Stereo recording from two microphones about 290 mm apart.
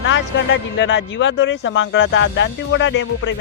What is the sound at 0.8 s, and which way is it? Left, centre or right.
Speech, left.